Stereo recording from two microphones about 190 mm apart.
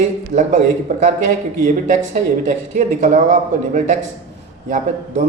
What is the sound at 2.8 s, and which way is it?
Speech, 40° right (ahead or behind).